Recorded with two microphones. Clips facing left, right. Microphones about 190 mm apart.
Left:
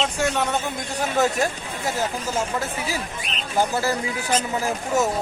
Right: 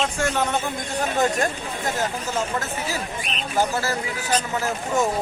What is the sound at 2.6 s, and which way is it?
Speech, 10° left (ahead or behind).